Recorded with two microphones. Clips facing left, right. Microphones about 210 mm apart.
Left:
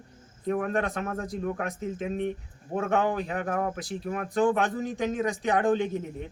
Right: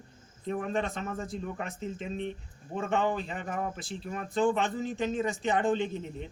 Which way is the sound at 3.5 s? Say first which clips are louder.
Left 4 dB; 65° left (ahead or behind).